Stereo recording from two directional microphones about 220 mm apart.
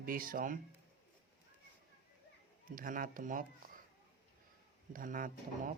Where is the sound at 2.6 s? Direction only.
40° right (ahead or behind).